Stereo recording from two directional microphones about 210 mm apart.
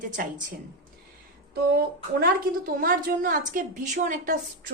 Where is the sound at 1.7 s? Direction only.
45° right (ahead or behind).